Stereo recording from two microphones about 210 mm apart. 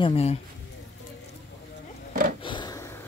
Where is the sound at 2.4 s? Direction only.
20° left (ahead or behind).